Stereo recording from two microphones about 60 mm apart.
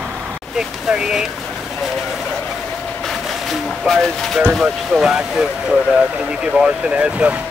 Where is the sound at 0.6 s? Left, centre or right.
Centre.